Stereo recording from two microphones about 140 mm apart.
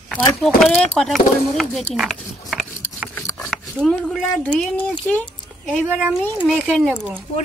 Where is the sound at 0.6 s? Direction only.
Centre (ahead or behind).